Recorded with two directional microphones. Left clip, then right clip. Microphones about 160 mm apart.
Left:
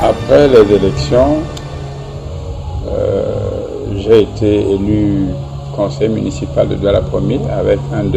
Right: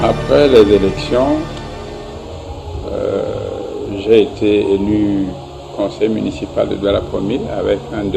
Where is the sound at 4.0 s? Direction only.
45° left (ahead or behind).